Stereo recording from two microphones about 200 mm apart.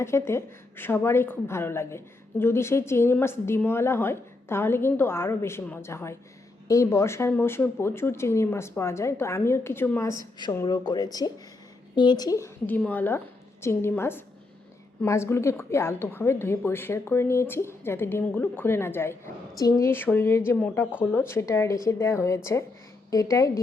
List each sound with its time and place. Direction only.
0.0 s a woman's voice: 15° left (ahead or behind)